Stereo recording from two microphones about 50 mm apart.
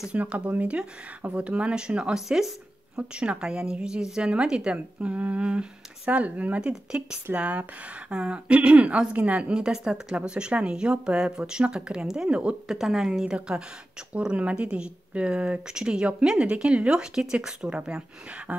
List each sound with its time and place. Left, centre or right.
0.1 s speech: right
2.2 s a woman's voice: centre
3.0 s a woman's voice: right
6.7 s a woman's voice: centre
7.3 s speech: right
8.1 s speech: centre
9.6 s a woman's voice: centre
12.6 s a woman's voice: centre
14.1 s speech: right
18.5 s beatboxing: right